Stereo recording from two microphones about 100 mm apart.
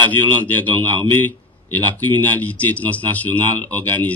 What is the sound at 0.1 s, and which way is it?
Speech, 15° left (ahead or behind).